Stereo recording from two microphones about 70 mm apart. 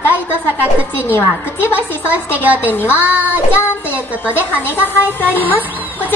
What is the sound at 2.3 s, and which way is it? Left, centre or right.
Speech, right.